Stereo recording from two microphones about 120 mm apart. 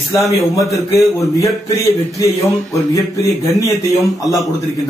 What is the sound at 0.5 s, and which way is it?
A man's voice, 25° left (ahead or behind).